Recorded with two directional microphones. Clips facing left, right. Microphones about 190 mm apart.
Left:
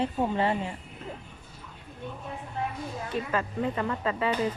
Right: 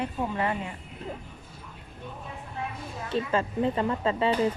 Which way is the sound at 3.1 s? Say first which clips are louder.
Right 4 dB; 30° right (ahead or behind).